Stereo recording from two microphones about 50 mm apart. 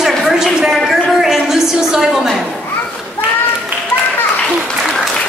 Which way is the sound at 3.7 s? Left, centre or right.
Right.